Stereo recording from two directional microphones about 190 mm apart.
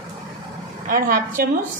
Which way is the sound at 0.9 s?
45° right (ahead or behind).